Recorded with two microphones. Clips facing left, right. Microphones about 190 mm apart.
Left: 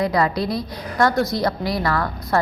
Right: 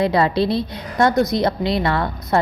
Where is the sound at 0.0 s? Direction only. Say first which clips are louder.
Right 3 dB; 25° right (ahead or behind).